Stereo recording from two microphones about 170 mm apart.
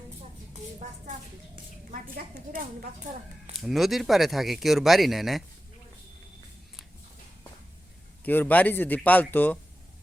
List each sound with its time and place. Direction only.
1.5 s a woman's voice: 55° right (ahead or behind)
3.5 s speech: centre (ahead or behind)
8.2 s speech: 10° left (ahead or behind)